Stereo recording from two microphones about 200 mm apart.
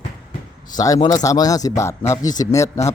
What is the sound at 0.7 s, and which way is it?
Speech, 20° left (ahead or behind).